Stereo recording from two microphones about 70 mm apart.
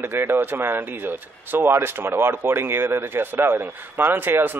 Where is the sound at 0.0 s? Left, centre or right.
Right.